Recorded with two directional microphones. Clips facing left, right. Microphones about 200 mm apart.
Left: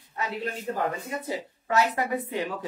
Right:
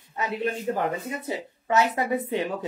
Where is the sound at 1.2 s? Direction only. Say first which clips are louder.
Right 4 dB; 25° right (ahead or behind).